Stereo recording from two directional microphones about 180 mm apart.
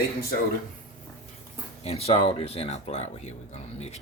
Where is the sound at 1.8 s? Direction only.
35° left (ahead or behind).